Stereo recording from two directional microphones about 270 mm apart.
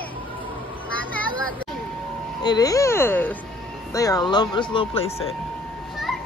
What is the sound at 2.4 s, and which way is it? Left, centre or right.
Speech, centre.